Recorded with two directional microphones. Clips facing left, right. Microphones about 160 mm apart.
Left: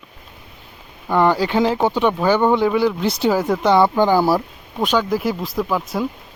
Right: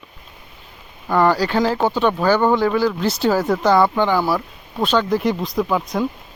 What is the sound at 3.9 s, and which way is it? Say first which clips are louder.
Speech: left 3 dB; 35° left (ahead or behind).